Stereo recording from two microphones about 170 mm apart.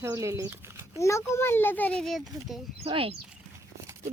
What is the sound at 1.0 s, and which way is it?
A child's voice, 15° left (ahead or behind).